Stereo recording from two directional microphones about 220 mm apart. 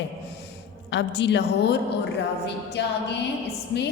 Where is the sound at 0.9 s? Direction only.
55° left (ahead or behind).